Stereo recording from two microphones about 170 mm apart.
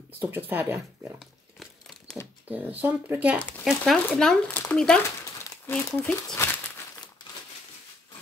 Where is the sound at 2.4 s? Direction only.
10° right (ahead or behind).